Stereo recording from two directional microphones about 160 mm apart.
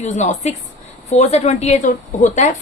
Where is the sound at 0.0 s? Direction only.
45° left (ahead or behind).